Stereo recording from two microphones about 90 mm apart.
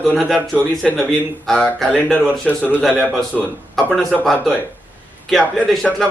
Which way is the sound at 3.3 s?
Centre (ahead or behind).